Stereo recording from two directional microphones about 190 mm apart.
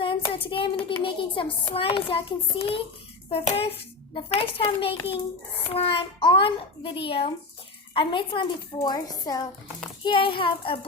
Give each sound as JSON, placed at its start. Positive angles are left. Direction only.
{"t": 0.0, "sound": "child singing", "side_deg": 30}